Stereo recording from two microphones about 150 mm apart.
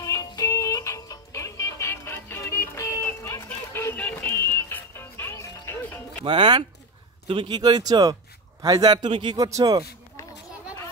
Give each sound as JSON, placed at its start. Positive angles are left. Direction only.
{"t": 0.0, "sound": "music", "side_deg": 20}
{"t": 6.2, "sound": "a man's voice", "side_deg": -30}